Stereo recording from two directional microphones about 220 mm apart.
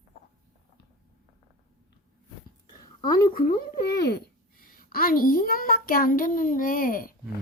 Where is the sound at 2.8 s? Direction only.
20° left (ahead or behind).